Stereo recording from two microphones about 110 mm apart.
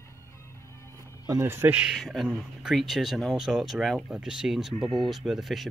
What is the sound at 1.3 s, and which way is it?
Speech, 25° right (ahead or behind).